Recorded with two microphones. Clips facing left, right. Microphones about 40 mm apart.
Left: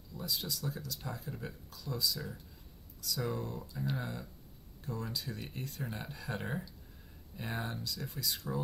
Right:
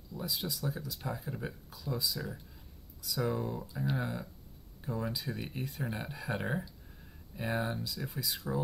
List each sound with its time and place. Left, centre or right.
0.1 s speech: centre